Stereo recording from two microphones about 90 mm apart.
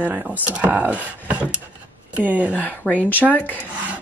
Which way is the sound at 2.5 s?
15° left (ahead or behind).